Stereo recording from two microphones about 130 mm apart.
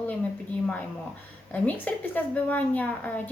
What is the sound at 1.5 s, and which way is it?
A woman's voice, 15° left (ahead or behind).